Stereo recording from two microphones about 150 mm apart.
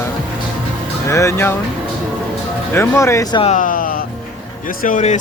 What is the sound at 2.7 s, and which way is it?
Speech, 15° left (ahead or behind).